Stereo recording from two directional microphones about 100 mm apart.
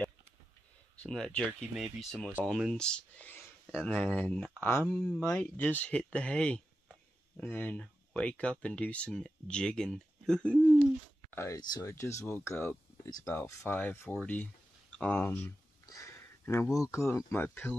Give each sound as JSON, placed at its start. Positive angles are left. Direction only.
{"t": 0.9, "sound": "speech", "side_deg": 10}
{"t": 4.9, "sound": "speech", "side_deg": 10}
{"t": 11.2, "sound": "speech", "side_deg": 25}
{"t": 13.0, "sound": "speech", "side_deg": 35}
{"t": 13.3, "sound": "speech", "side_deg": 25}
{"t": 15.9, "sound": "a sound", "side_deg": 30}
{"t": 16.9, "sound": "speech", "side_deg": 30}